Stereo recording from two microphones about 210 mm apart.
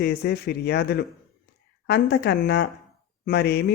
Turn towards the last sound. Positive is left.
turn(degrees=50)  # may be behind; listen again after turning